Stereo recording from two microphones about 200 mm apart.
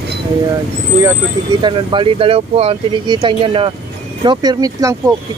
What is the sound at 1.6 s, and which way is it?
Speech, 25° right (ahead or behind).